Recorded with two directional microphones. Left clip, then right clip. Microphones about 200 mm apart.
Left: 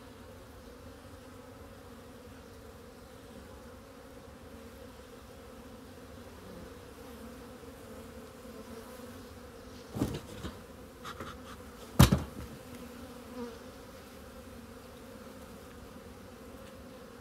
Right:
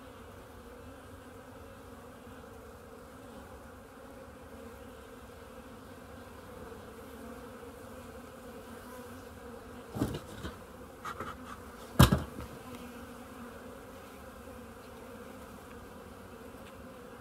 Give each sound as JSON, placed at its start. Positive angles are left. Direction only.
{"t": 9.9, "sound": "bee", "side_deg": 0}
{"t": 12.0, "sound": "insect", "side_deg": 25}